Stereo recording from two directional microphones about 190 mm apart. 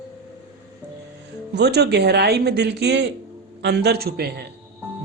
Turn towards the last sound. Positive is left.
turn(degrees=-55)  # may be behind; listen again after turning